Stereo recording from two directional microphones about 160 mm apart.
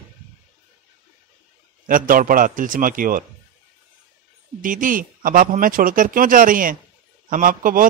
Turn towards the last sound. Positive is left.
turn(degrees=-60)  # may be behind; listen again after turning